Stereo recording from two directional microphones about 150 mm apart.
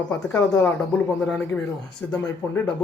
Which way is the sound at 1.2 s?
5° left (ahead or behind).